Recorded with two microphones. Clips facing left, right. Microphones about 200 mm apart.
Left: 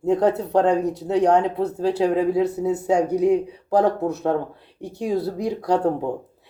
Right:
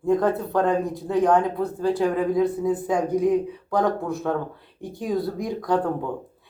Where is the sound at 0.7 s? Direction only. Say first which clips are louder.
Left 3 dB; 75° left (ahead or behind).